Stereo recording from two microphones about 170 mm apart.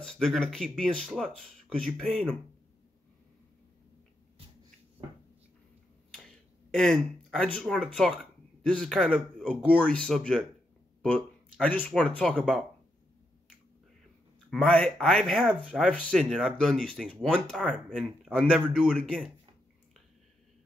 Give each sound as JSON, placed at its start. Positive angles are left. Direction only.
{"t": 0.0, "sound": "speech", "side_deg": 5}
{"t": 6.7, "sound": "speech", "side_deg": 5}
{"t": 14.5, "sound": "speech", "side_deg": 5}